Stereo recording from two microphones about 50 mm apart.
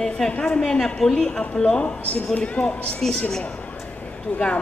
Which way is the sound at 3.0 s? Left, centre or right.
Centre.